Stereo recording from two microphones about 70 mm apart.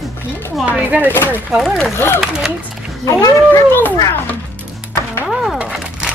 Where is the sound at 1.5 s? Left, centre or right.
Centre.